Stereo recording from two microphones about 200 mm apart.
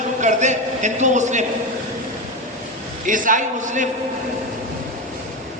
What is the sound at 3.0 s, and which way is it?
Speech, 40° right (ahead or behind).